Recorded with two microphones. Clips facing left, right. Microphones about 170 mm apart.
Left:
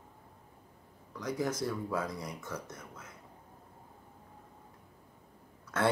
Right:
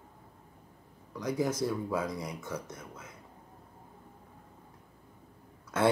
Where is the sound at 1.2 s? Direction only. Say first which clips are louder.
Right 3 dB; 5° right (ahead or behind).